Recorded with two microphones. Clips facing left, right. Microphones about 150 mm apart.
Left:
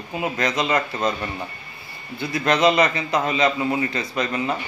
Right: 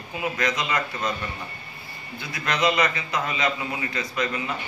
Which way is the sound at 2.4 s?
30° left (ahead or behind).